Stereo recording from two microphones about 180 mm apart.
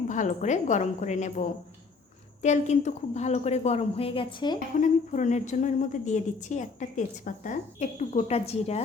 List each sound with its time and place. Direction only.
0.1 s a woman's voice: 40° left (ahead or behind); by 4.5 s 25° left (ahead or behind)
4.8 s a woman's voice: 45° left (ahead or behind)